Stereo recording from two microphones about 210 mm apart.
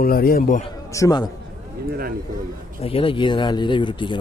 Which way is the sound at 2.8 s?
25° left (ahead or behind).